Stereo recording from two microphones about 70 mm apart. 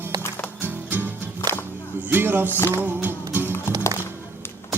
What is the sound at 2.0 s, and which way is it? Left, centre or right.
Music, right.